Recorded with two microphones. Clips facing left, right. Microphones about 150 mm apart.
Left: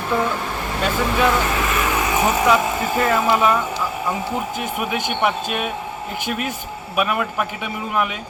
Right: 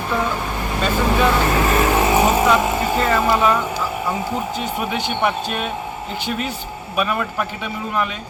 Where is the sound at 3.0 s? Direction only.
5° left (ahead or behind).